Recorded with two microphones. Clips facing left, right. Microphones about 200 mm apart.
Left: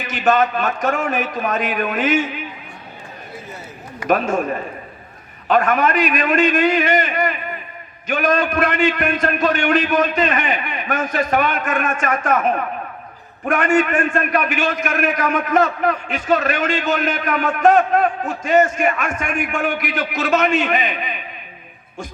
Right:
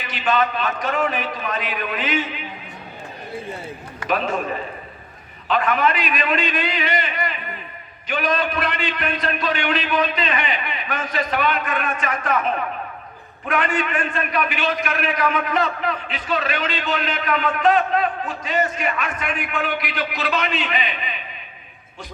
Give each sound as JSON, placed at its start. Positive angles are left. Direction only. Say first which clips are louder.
{"t": 0.0, "sound": "a man's voice", "louder": "left 4 dB", "side_deg": 45}
{"t": 4.1, "sound": "a man's voice", "louder": "left 5 dB", "side_deg": 45}
{"t": 5.5, "sound": "a man's voice", "louder": "left 3 dB", "side_deg": 45}